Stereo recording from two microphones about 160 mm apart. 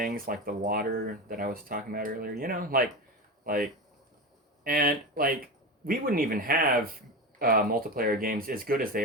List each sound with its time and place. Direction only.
0.0 s speech: 60° right (ahead or behind)